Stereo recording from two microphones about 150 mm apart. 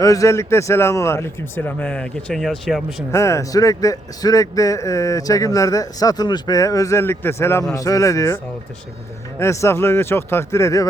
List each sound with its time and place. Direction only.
0.0 s speech: 20° left (ahead or behind); by 2.8 s centre (ahead or behind)
3.1 s a man's voice: 20° left (ahead or behind)
9.4 s speech: 20° left (ahead or behind)